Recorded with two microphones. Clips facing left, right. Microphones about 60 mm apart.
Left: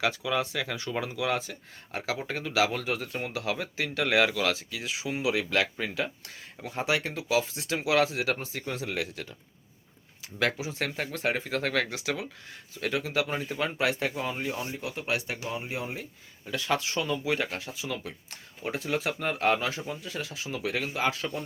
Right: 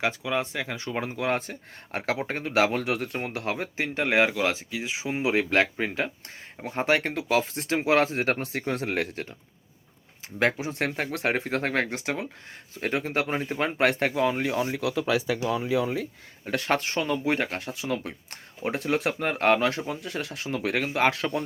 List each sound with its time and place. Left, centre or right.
0.0 s speech: right
8.4 s speech: right
10.6 s speech: right
11.7 s speech: right
16.5 s speech: right